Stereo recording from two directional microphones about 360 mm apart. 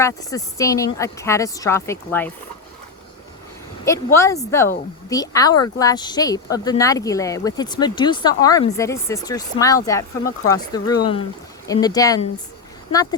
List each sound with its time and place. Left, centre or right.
0.0 s speech: centre
3.8 s speech: centre